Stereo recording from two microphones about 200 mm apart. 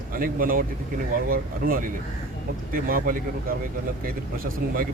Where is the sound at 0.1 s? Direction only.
45° right (ahead or behind).